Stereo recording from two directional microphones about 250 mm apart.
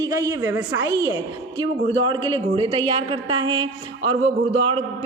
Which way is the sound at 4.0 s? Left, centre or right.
Right.